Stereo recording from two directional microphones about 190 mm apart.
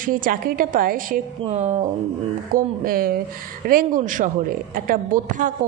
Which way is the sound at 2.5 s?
50° right (ahead or behind).